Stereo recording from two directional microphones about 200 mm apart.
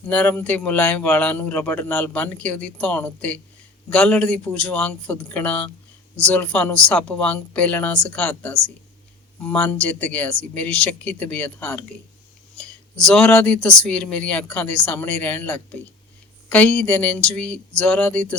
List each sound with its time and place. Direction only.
0.1 s a man's voice: 10° left (ahead or behind)
13.1 s a man's voice: 5° left (ahead or behind)